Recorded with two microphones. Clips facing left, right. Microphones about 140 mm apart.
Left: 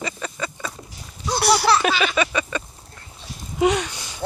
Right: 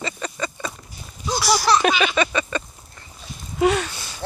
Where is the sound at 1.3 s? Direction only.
60° left (ahead or behind).